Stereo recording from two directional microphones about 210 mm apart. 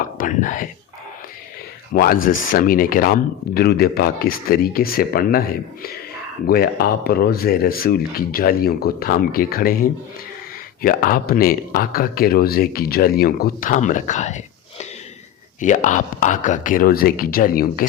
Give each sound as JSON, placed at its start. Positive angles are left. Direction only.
{"t": 0.2, "sound": "speech", "side_deg": 40}
{"t": 1.9, "sound": "speech", "side_deg": 40}
{"t": 6.5, "sound": "speech", "side_deg": 45}